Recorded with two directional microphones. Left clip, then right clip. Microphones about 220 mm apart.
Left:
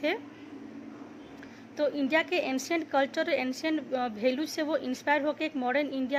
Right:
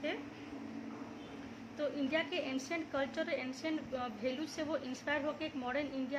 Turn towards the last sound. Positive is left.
turn(degrees=30)  # may be behind; listen again after turning